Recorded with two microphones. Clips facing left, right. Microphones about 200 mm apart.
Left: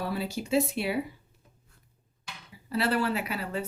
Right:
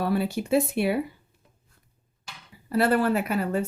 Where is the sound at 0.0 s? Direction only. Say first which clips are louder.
Right 6 dB; 55° right (ahead or behind).